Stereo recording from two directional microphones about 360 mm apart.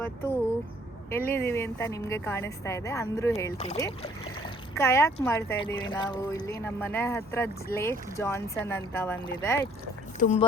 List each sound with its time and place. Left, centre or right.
1.1 s speech: centre
4.8 s speech: centre
10.2 s speech: centre